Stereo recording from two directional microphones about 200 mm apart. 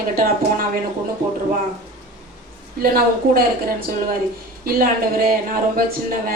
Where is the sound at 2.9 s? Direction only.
50° right (ahead or behind).